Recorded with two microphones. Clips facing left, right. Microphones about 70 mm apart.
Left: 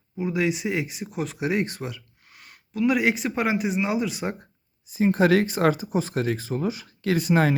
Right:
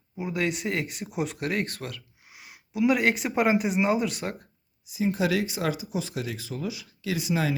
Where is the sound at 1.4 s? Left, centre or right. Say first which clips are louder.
Left 4 dB; centre.